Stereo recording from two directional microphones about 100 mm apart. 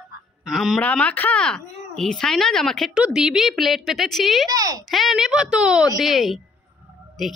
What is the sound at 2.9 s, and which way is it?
Speech, 10° right (ahead or behind).